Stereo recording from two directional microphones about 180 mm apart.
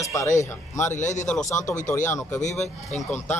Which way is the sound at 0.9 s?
40° left (ahead or behind).